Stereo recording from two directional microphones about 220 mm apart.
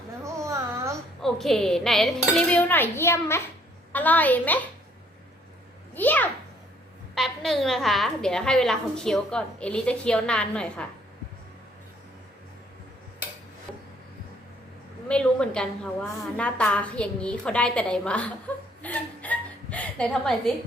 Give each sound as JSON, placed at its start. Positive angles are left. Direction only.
{"t": 0.3, "sound": "a sound", "side_deg": -15}
{"t": 1.2, "sound": "a woman's voice", "side_deg": 0}
{"t": 5.9, "sound": "a child's voice", "side_deg": 10}
{"t": 15.0, "sound": "a woman's voice", "side_deg": 5}
{"t": 18.8, "sound": "chuckle", "side_deg": 5}